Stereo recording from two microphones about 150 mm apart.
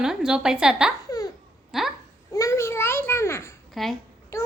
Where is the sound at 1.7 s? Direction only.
Centre (ahead or behind).